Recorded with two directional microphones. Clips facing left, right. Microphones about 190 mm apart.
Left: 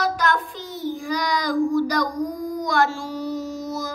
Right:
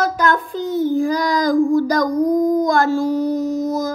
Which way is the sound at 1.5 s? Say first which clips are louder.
Right 4 dB; 45° right (ahead or behind).